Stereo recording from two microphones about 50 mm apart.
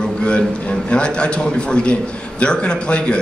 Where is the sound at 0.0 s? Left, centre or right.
Centre.